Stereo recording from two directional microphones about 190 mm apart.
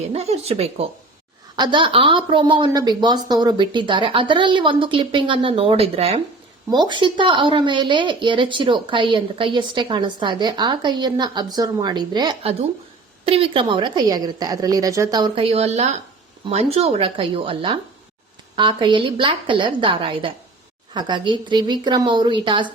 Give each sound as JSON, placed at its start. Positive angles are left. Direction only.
{"t": 0.1, "sound": "a woman's voice", "side_deg": -30}